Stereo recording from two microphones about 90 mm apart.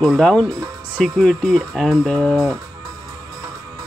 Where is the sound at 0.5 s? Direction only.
40° right (ahead or behind).